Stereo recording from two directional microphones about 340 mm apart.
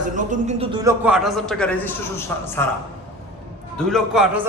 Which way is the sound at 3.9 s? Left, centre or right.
Centre.